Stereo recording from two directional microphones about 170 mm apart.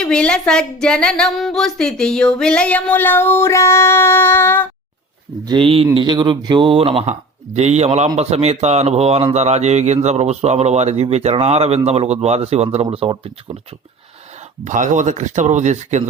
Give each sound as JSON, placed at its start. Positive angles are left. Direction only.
{"t": 0.0, "sound": "speech", "side_deg": 5}
{"t": 5.5, "sound": "speech", "side_deg": -30}
{"t": 14.6, "sound": "speech", "side_deg": -45}